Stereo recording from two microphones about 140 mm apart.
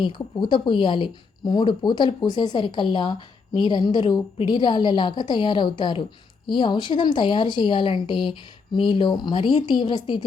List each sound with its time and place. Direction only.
0.0 s speech: 35° left (ahead or behind)